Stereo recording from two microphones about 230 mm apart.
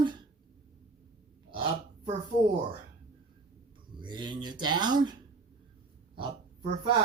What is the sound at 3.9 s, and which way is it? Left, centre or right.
Speech, centre.